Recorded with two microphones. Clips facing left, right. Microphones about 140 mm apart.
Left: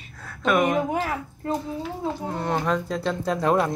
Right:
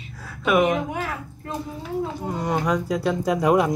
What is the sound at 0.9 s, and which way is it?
Speech, 40° left (ahead or behind).